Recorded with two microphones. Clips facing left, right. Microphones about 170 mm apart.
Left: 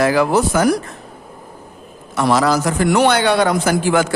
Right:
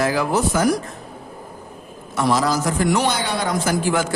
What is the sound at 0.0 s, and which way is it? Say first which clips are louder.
Speech: left 5 dB; 70° left (ahead or behind).